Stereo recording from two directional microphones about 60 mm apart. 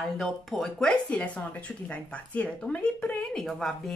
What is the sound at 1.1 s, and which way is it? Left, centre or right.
Speech, left.